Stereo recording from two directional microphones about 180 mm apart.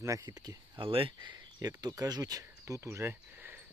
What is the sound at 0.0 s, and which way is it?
Speech, 15° right (ahead or behind).